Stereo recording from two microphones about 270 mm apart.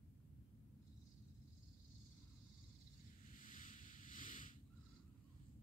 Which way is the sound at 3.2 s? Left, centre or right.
Left.